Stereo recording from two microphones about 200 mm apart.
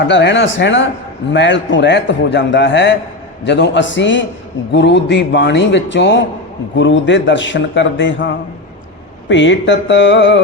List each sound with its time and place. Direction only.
0.1 s a man's voice: 60° left (ahead or behind)